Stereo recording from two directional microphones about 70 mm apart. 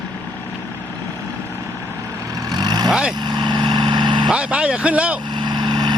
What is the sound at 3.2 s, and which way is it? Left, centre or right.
Vehicle, right.